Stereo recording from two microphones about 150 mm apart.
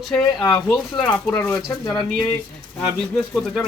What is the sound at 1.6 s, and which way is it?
Speech, 30° left (ahead or behind).